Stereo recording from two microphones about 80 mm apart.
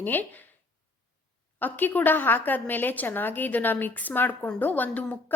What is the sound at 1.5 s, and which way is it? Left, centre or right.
A woman's voice, left.